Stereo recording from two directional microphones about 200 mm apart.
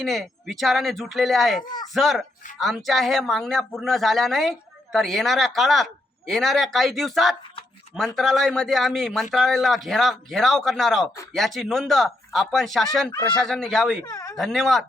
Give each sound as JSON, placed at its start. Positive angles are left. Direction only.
{"t": 0.0, "sound": "speech", "side_deg": 0}
{"t": 14.0, "sound": "a sound", "side_deg": 15}
{"t": 14.3, "sound": "speech", "side_deg": 0}